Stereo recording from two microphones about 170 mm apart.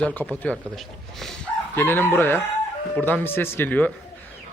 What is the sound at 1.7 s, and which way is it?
A man's voice, 10° left (ahead or behind).